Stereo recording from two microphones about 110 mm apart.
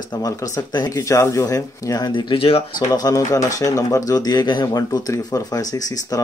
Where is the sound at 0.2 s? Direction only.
35° left (ahead or behind); by 2.6 s 60° left (ahead or behind).